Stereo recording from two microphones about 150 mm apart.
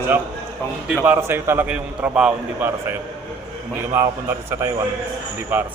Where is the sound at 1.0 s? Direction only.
15° right (ahead or behind).